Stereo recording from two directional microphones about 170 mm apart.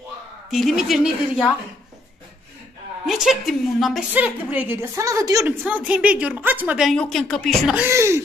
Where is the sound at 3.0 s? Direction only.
Centre (ahead or behind).